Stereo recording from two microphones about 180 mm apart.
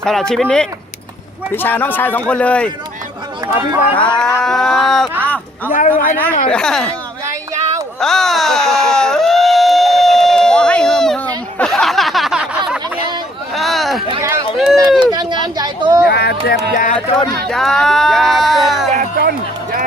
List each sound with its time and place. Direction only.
0.0 s speech: 5° left (ahead or behind)
3.4 s chatter: 20° right (ahead or behind)
3.8 s speech: 25° left (ahead or behind)
4.4 s a sound: centre (ahead or behind)
5.7 s a sound: 45° left (ahead or behind)
6.5 s speech: 5° left (ahead or behind)
7.9 s a sound: centre (ahead or behind)
14.1 s run: 15° right (ahead or behind)
14.5 s run: centre (ahead or behind)
14.9 s a sound: 25° right (ahead or behind)
16.0 s music: 65° left (ahead or behind); by 17.2 s 45° left (ahead or behind)
17.5 s speech: centre (ahead or behind)
18.9 s speech: 60° right (ahead or behind)